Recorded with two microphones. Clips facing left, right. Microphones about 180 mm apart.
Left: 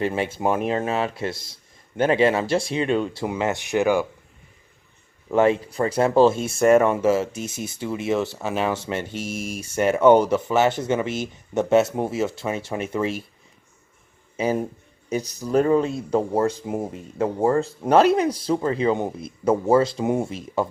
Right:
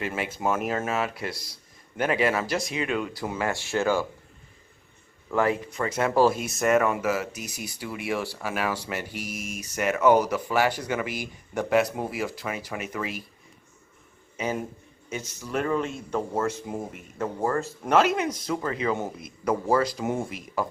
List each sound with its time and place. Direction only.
0.0 s speech: 30° left (ahead or behind)
5.3 s speech: 20° left (ahead or behind)
14.3 s a man's voice: 35° left (ahead or behind)